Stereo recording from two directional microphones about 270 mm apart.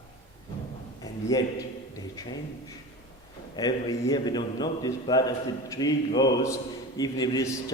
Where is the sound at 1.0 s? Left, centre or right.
Centre.